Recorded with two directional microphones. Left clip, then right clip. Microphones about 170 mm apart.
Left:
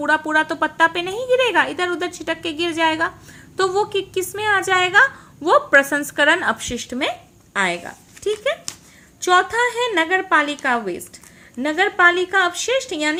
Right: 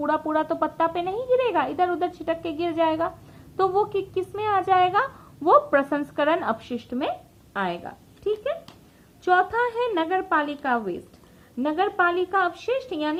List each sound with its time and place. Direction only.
0.0 s a woman's voice: 10° left (ahead or behind)
9.5 s a woman's voice: 15° left (ahead or behind)